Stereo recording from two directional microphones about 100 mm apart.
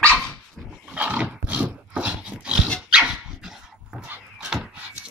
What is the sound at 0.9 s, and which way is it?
Dog, 15° right (ahead or behind).